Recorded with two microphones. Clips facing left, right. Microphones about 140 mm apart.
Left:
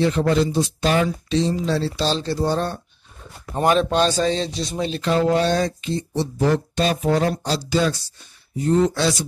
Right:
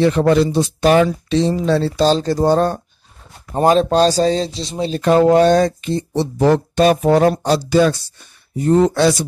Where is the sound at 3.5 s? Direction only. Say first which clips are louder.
Right 5 dB; 35° right (ahead or behind).